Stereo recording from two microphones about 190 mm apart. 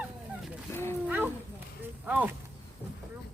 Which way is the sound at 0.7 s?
15° left (ahead or behind).